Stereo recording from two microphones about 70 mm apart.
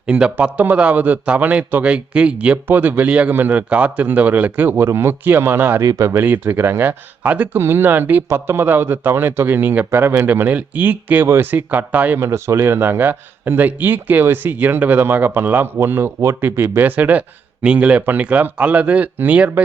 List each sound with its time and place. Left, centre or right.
0.1 s a man's voice: centre
2.6 s speech: right
5.8 s speech: right
6.2 s speech: right
12.2 s speech: right